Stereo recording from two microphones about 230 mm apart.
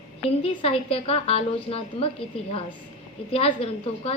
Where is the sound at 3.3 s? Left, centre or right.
Left.